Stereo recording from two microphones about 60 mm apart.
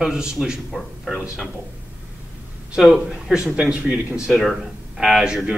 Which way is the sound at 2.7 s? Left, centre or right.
Centre.